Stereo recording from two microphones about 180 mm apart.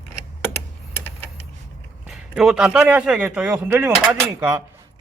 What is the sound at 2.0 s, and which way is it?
A man's voice, 5° right (ahead or behind).